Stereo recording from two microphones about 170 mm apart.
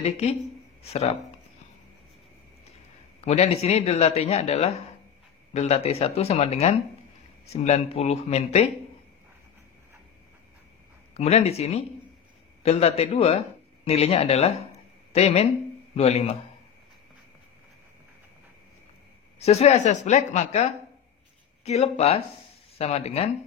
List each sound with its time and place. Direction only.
0.0 s speech: 35° left (ahead or behind)
3.3 s speech: 40° left (ahead or behind)
11.1 s a man's voice: 40° left (ahead or behind)
19.3 s speech: 40° left (ahead or behind)